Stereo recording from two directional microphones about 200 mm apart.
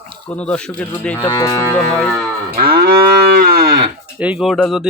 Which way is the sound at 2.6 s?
50° right (ahead or behind).